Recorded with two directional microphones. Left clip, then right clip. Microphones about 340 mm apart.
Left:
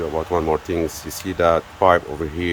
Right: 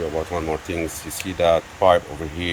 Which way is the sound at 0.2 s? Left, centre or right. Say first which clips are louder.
Left 4 dB; centre.